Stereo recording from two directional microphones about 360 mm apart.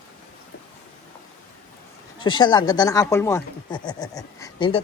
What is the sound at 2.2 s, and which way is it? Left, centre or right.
Speech, centre.